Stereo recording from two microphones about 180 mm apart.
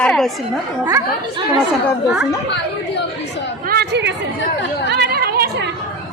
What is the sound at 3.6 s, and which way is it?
Chatter, 60° right (ahead or behind).